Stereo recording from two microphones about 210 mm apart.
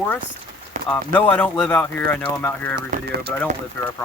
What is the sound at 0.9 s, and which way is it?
Speech, 10° left (ahead or behind).